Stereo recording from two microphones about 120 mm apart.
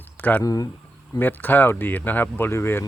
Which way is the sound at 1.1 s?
15° left (ahead or behind).